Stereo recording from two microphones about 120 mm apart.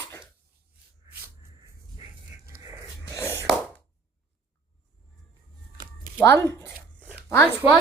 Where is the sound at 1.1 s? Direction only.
35° right (ahead or behind).